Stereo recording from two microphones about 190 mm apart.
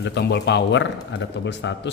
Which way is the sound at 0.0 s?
65° left (ahead or behind).